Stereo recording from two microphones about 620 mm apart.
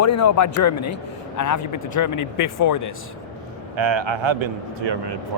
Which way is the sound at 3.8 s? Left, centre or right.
Right.